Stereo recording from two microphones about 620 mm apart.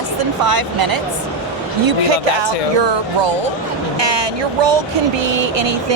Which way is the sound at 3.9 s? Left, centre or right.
Right.